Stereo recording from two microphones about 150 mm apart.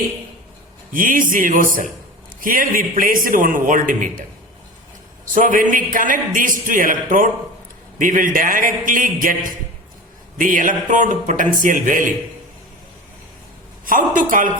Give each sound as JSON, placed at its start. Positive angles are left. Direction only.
{"t": 0.9, "sound": "a man's voice", "side_deg": -65}
{"t": 5.2, "sound": "a man's voice", "side_deg": -60}
{"t": 13.8, "sound": "speech", "side_deg": -60}